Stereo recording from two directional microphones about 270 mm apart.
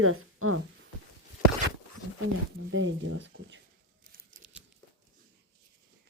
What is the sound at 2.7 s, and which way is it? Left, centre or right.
Speech, right.